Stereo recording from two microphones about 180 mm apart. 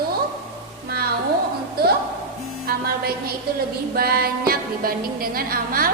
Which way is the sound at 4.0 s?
55° right (ahead or behind).